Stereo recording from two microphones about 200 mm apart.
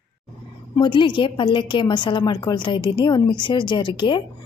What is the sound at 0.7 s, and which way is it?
A woman's voice, 25° left (ahead or behind).